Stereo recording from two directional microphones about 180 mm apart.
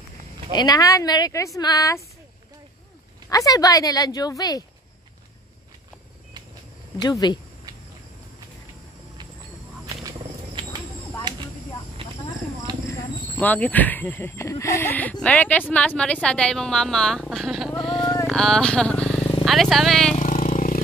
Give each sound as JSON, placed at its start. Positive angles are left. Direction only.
{"t": 0.5, "sound": "speech", "side_deg": 20}
{"t": 3.3, "sound": "speech", "side_deg": 20}
{"t": 7.0, "sound": "speech", "side_deg": 25}
{"t": 10.0, "sound": "wild animals", "side_deg": -25}
{"t": 12.9, "sound": "speech", "side_deg": 10}
{"t": 20.2, "sound": "a sound", "side_deg": 40}